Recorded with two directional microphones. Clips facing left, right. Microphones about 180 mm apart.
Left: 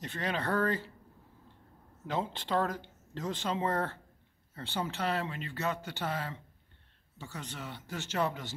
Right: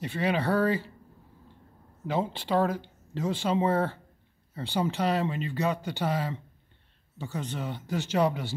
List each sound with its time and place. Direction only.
0.0 s speech: 10° right (ahead or behind)
2.0 s speech: 10° right (ahead or behind)